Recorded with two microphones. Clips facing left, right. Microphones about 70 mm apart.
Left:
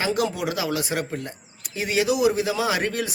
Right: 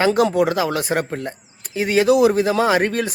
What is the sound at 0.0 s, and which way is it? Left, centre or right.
A man's voice, right.